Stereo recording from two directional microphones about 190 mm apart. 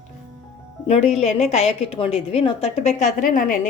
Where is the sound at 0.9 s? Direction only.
35° left (ahead or behind).